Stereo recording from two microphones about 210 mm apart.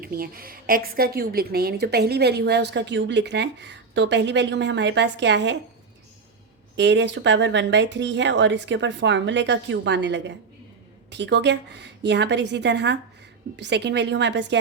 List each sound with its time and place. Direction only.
0.0 s speech: 45° right (ahead or behind)
6.7 s speech: 55° right (ahead or behind)